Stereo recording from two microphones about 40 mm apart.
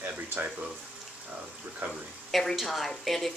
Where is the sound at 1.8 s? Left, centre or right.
Right.